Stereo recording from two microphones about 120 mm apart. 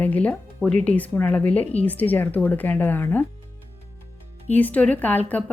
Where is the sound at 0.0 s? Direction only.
10° left (ahead or behind).